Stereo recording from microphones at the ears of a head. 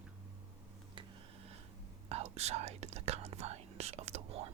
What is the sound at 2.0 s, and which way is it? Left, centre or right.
Whispering, right.